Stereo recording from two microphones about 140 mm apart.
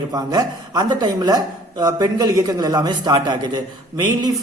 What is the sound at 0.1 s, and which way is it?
Speech, 30° right (ahead or behind).